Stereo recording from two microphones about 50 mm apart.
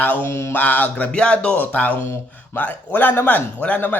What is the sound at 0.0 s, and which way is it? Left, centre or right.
Speech, left.